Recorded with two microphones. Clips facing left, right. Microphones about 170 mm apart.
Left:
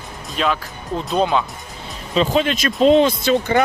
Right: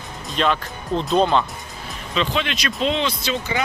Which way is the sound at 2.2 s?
40° left (ahead or behind).